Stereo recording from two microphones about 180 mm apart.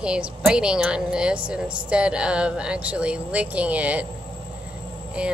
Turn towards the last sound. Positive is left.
turn(degrees=-5)  # may be behind; listen again after turning